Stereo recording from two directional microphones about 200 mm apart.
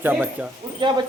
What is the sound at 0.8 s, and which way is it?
Speech, 25° right (ahead or behind).